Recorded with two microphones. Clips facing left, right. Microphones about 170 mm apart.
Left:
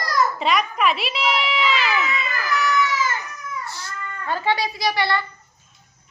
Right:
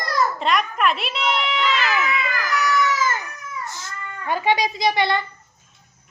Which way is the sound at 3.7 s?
15° right (ahead or behind).